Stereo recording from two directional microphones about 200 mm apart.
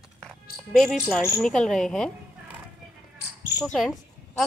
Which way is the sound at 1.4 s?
5° left (ahead or behind).